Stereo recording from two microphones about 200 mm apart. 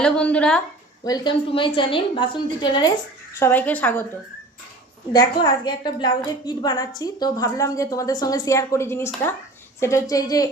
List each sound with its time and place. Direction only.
0.0 s a woman's voice: 5° left (ahead or behind)
1.0 s a woman's voice: 20° left (ahead or behind)
3.3 s a woman's voice: 10° left (ahead or behind)
5.1 s a woman's voice: 20° left (ahead or behind)